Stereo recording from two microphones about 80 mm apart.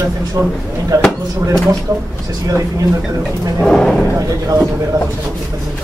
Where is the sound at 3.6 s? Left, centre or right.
Centre.